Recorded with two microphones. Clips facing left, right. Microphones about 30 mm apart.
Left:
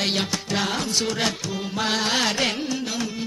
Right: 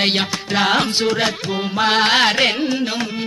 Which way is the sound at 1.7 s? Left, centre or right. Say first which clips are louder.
Right 8 dB; right.